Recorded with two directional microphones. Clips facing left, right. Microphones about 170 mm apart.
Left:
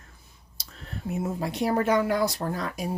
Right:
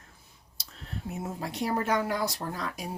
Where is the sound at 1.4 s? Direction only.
60° left (ahead or behind).